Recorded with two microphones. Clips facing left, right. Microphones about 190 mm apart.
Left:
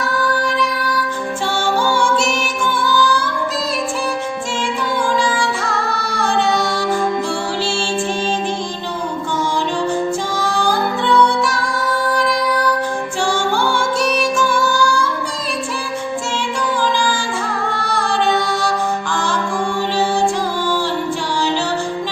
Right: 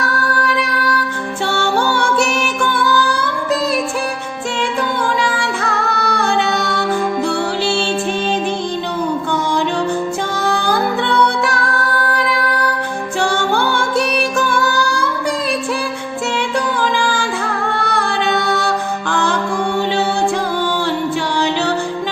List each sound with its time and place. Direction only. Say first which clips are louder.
1.8 s music: even; 65° right (ahead or behind)
6.0 s music: right 2 dB; 60° right (ahead or behind)
10.3 s music: right 3 dB; 60° right (ahead or behind)
13.2 s music: right 1 dB; 60° right (ahead or behind)
17.7 s music: even; 60° right (ahead or behind)